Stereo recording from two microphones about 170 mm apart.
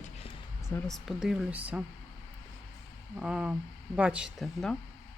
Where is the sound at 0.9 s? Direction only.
Centre (ahead or behind).